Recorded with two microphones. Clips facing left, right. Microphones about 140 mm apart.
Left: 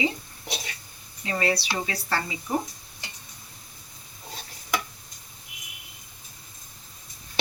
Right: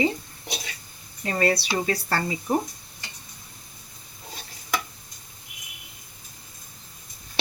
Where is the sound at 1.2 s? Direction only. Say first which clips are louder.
Right 3 dB; 50° right (ahead or behind).